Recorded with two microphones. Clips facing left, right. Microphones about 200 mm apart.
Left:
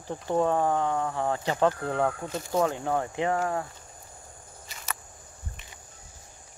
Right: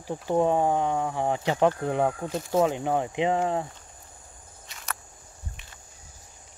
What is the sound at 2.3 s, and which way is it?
Speech, centre (ahead or behind).